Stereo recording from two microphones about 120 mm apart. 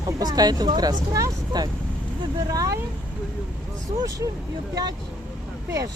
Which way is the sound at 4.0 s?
30° right (ahead or behind).